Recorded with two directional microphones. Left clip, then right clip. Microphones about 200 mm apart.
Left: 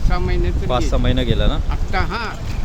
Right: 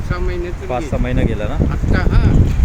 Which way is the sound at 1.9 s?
55° left (ahead or behind).